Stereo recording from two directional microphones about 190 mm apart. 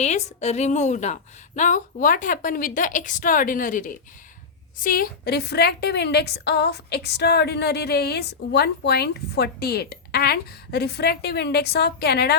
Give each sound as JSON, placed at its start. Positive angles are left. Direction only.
{"t": 0.0, "sound": "a woman's voice", "side_deg": 35}